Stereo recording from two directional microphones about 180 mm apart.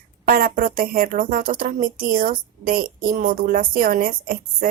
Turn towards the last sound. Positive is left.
turn(degrees=-55)  # may be behind; listen again after turning